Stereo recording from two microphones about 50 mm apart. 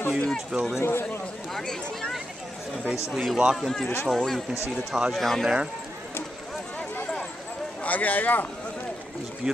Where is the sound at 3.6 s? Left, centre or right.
Centre.